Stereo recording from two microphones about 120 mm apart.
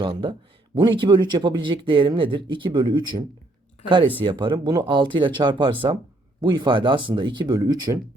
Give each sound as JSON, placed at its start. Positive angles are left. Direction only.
{"t": 0.0, "sound": "speech", "side_deg": -40}